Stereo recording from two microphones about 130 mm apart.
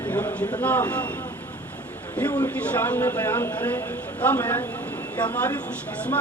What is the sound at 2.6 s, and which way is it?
A man's voice, 15° left (ahead or behind).